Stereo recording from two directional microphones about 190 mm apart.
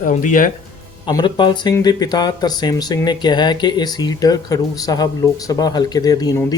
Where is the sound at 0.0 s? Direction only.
45° left (ahead or behind).